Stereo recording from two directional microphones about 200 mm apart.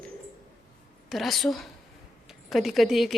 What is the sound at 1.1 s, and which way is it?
Speech, centre (ahead or behind).